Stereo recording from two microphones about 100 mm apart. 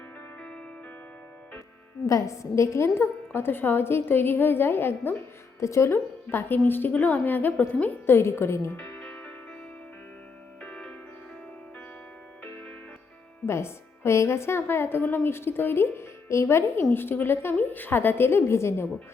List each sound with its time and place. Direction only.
2.0 s a woman's voice: 30° left (ahead or behind)
8.8 s music: 15° left (ahead or behind)
10.6 s music: 15° left (ahead or behind)
12.5 s music: 20° left (ahead or behind)
13.4 s a woman's voice: 25° left (ahead or behind)